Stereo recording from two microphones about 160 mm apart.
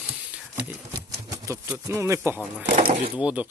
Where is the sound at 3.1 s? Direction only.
10° right (ahead or behind).